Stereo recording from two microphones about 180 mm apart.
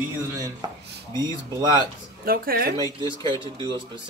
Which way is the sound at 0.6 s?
25° right (ahead or behind).